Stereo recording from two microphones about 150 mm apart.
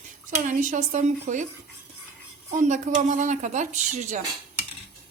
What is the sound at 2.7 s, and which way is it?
Speech, 55° right (ahead or behind).